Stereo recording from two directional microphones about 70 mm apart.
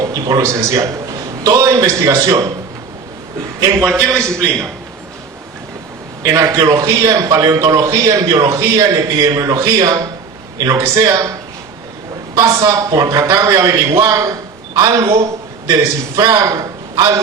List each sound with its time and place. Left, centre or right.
0.0 s a man's voice: right
0.4 s a man's voice: right
1.5 s a man's voice: right
4.1 s a man's voice: centre
6.2 s a man's voice: right
7.5 s a man's voice: right
12.5 s a man's voice: right
14.8 s a man's voice: right
15.7 s a man's voice: right